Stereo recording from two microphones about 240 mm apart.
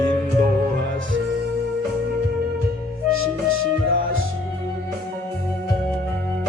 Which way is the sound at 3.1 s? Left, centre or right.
Right.